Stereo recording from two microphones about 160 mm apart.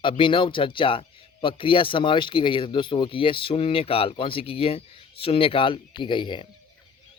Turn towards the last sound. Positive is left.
turn(degrees=30)  # may be behind; listen again after turning